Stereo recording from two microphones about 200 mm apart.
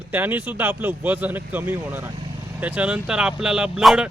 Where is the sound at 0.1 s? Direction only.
10° right (ahead or behind).